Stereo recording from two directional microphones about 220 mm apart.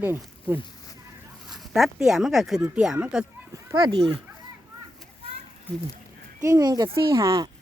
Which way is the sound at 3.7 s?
20° right (ahead or behind).